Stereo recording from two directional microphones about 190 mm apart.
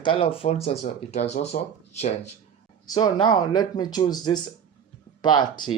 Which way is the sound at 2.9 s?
20° left (ahead or behind).